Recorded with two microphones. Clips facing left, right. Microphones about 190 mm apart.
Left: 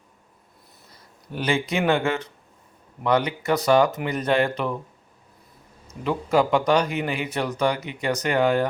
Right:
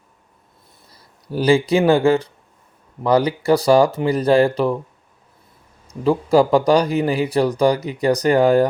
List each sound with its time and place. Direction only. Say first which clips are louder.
1.3 s speech: right 9 dB; 35° right (ahead or behind)
6.0 s speech: right 6 dB; 35° right (ahead or behind)